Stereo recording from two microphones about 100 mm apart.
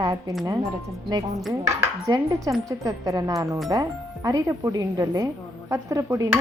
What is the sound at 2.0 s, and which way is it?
Speech, 35° right (ahead or behind).